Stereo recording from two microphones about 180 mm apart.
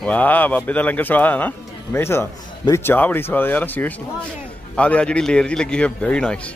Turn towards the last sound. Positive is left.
turn(degrees=5)  # may be behind; listen again after turning